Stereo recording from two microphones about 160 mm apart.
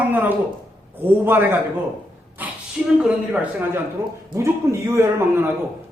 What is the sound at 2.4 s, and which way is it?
Gasp, 10° right (ahead or behind).